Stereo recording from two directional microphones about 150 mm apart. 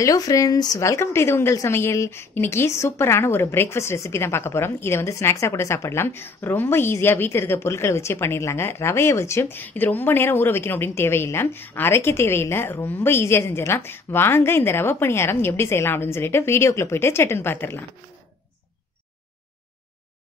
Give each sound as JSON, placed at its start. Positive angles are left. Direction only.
{"t": 0.0, "sound": "a woman's voice", "side_deg": 25}